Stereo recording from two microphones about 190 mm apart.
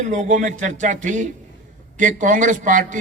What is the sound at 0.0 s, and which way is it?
A man's voice, 40° right (ahead or behind).